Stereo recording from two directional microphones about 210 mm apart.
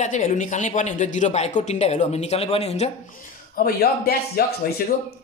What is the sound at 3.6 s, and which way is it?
Speech, 45° left (ahead or behind).